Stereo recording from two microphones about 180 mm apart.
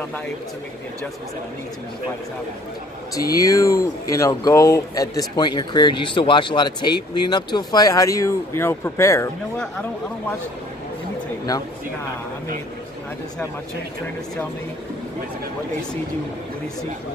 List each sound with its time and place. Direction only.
3.2 s speech: 20° left (ahead or behind)